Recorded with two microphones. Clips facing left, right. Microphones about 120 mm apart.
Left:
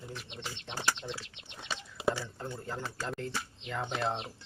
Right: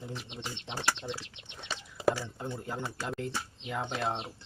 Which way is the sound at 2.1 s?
15° right (ahead or behind).